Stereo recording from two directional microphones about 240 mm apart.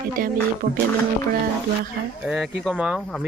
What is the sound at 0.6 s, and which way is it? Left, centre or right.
Speech, right.